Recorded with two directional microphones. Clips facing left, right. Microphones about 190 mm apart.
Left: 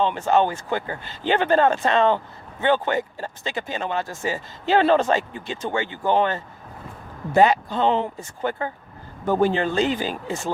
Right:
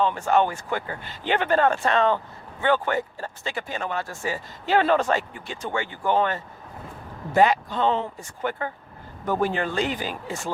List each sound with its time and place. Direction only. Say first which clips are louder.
0.0 s speech: left 2 dB; 25° left (ahead or behind)